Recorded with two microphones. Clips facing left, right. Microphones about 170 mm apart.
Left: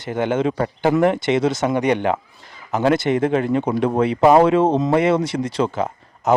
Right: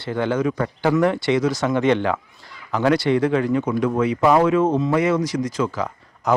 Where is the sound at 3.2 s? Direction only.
25° left (ahead or behind).